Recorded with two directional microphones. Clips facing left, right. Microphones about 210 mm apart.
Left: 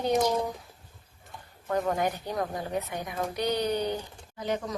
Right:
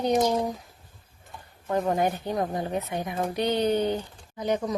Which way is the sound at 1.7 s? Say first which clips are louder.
Right 3 dB; 25° right (ahead or behind).